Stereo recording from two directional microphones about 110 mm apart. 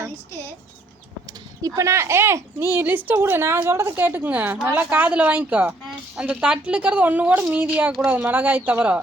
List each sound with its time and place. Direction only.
1.3 s a woman's voice: 30° right (ahead or behind); by 9.0 s 15° right (ahead or behind)